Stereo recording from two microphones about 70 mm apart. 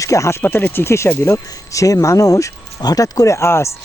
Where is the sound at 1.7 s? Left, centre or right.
Left.